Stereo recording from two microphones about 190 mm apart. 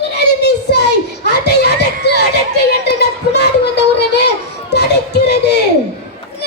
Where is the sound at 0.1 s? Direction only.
60° left (ahead or behind).